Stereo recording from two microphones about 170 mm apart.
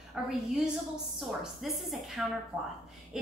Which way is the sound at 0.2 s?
Centre (ahead or behind).